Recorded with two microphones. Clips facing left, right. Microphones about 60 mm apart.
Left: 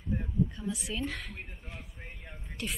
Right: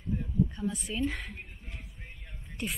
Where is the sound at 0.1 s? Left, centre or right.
Left.